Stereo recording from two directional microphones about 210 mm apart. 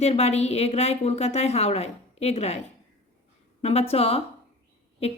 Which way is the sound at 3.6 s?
30° left (ahead or behind).